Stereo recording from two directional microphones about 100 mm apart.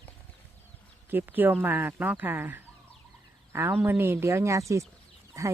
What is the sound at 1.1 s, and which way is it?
Speech, 20° right (ahead or behind).